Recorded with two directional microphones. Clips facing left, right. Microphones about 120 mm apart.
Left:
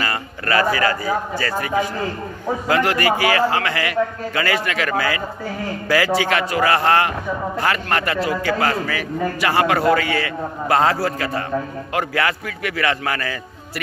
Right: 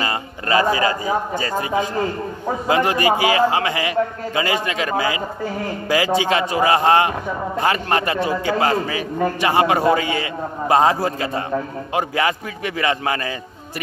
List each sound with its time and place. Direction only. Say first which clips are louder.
0.0 s a man's voice: right 1 dB; 20° right (ahead or behind)